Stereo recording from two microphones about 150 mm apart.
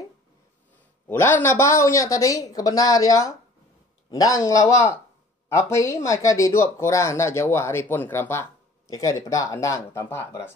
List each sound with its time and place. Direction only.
1.0 s speech: 15° left (ahead or behind)